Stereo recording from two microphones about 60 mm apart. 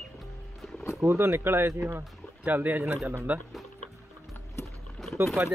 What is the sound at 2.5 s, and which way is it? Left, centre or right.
Speech, right.